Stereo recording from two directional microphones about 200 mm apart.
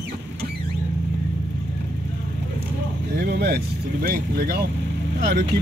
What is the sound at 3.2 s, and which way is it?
Speech, 55° right (ahead or behind).